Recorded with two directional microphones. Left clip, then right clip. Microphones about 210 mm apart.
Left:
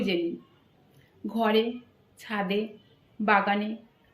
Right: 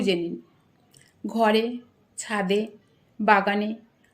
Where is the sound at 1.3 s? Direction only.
55° right (ahead or behind).